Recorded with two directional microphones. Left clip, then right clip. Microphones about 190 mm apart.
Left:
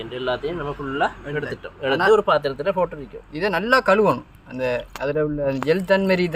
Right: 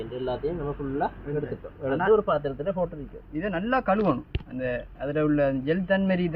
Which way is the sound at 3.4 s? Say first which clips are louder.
Left 8 dB; 70° left (ahead or behind).